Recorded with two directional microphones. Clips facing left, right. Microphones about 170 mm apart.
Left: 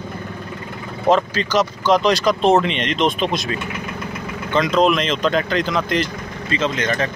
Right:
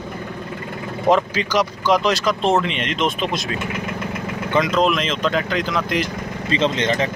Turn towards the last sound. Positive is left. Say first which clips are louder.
# right 1 dB
turn(degrees=-25)  # may be behind; listen again after turning